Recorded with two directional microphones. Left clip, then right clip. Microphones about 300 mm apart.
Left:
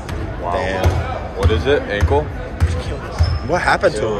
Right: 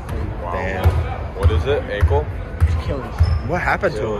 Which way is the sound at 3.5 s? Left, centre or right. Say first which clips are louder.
Left 4 dB; centre.